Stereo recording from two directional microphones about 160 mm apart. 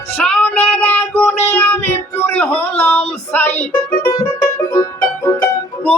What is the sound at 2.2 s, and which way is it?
Speech, 10° left (ahead or behind).